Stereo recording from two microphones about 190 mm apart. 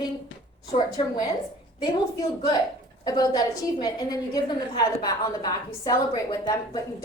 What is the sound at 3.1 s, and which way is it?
A woman's voice, 20° left (ahead or behind).